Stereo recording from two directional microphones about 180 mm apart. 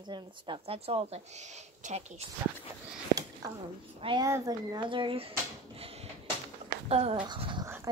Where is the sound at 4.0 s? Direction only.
25° right (ahead or behind).